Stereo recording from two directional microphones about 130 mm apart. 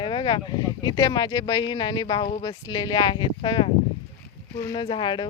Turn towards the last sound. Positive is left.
turn(degrees=35)  # may be behind; listen again after turning